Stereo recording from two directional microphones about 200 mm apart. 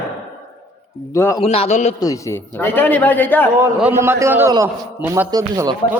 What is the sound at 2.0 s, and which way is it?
A man's voice, 15° left (ahead or behind).